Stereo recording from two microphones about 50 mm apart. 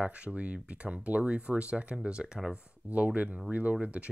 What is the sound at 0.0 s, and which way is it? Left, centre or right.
Speech, right.